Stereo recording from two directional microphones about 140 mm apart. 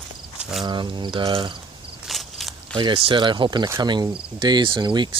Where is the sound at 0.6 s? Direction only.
35° right (ahead or behind).